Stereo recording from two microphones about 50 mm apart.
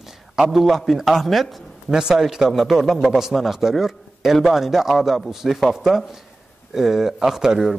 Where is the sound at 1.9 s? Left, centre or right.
Centre.